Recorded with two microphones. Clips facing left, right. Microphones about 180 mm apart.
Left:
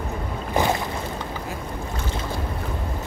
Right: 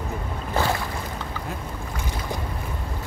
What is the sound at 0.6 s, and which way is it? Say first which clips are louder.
Boat: left 2 dB; 20° left (ahead or behind).